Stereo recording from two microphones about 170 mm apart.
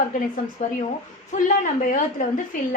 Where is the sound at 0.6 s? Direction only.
45° left (ahead or behind).